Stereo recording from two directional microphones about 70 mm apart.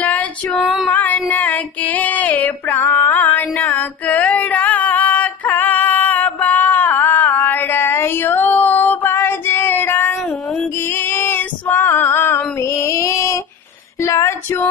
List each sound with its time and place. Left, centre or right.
0.8 s child singing: left
3.1 s a sound: left
11.0 s female singing: left